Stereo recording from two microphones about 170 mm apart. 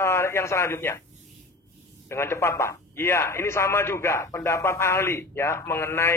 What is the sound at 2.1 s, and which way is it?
Speech, 15° left (ahead or behind).